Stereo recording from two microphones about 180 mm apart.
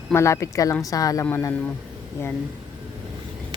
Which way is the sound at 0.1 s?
15° left (ahead or behind).